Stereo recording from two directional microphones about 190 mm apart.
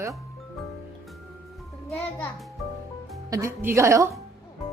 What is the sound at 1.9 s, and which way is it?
Speech, 5° left (ahead or behind).